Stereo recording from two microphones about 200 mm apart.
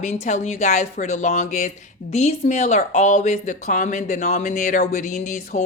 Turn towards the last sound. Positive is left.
turn(degrees=40)  # may be behind; listen again after turning